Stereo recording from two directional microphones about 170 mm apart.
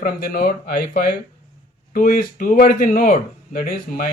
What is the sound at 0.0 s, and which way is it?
Speech, 55° left (ahead or behind).